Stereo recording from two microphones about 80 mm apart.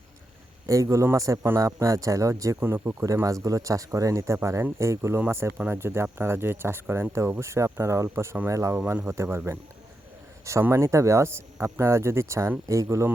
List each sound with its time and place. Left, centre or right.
0.7 s a man's voice: right
2.6 s speech: right
10.6 s speech: right